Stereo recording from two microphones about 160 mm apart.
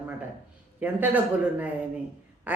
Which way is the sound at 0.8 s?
10° right (ahead or behind).